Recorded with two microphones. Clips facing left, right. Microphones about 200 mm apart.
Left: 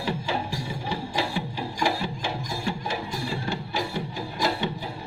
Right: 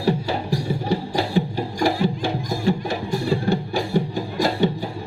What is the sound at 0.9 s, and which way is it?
Music, 40° right (ahead or behind).